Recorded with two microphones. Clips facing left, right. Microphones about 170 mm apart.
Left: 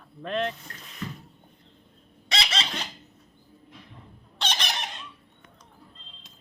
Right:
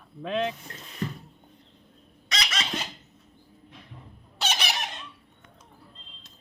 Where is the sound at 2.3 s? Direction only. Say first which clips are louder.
Left 2 dB; 30° left (ahead or behind).